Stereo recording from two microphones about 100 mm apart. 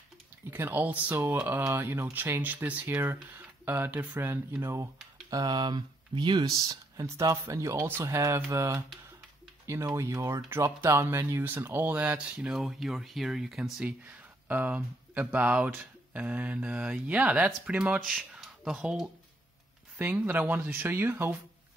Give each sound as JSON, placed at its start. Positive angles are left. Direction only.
{"t": 0.5, "sound": "speech", "side_deg": -20}
{"t": 5.3, "sound": "speech", "side_deg": -45}
{"t": 13.7, "sound": "speech", "side_deg": -15}
{"t": 18.0, "sound": "speech", "side_deg": 0}